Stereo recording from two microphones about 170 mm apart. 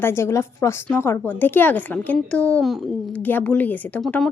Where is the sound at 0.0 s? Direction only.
15° left (ahead or behind).